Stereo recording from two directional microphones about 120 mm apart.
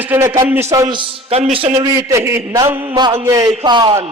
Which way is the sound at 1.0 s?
50° right (ahead or behind).